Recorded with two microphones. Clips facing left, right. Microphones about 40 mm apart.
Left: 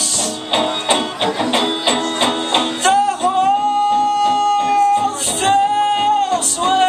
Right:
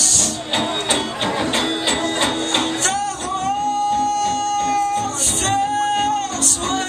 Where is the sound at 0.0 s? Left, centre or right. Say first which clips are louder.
Left 1 dB; left.